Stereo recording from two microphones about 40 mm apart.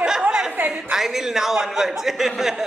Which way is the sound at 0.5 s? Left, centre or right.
Right.